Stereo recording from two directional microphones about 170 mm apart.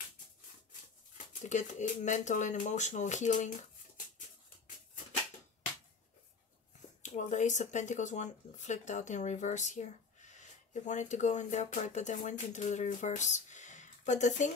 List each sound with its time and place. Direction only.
1.1 s speech: 45° left (ahead or behind)
7.0 s speech: 45° left (ahead or behind)